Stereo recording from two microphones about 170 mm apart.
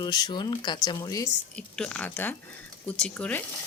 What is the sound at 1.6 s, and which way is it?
Speech, 5° left (ahead or behind).